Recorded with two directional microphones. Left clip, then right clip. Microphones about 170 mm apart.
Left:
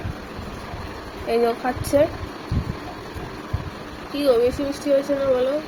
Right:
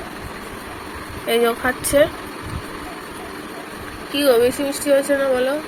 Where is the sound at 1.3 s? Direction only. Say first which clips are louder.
Right 3 dB; 5° right (ahead or behind).